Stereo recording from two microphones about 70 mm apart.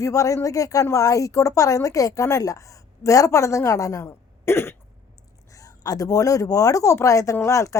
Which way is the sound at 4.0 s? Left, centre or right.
Left.